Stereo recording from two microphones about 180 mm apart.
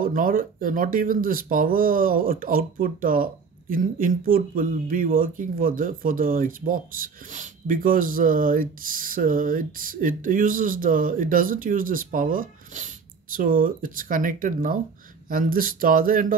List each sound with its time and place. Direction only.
0.0 s speech: 50° right (ahead or behind)